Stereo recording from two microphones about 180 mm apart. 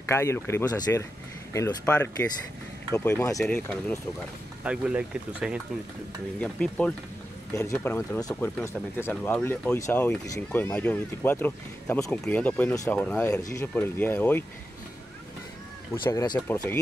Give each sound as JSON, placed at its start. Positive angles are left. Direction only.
{"t": 0.1, "sound": "speech", "side_deg": 15}
{"t": 4.6, "sound": "speech", "side_deg": -5}
{"t": 6.4, "sound": "speech", "side_deg": 5}
{"t": 16.0, "sound": "speech", "side_deg": 20}